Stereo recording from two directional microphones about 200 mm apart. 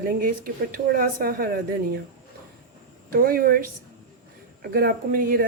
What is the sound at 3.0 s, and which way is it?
Speech, 45° right (ahead or behind).